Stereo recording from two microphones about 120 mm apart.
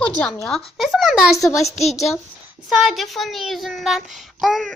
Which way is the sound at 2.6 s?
Centre (ahead or behind).